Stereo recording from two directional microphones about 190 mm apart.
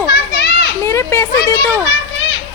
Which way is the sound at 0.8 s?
15° left (ahead or behind).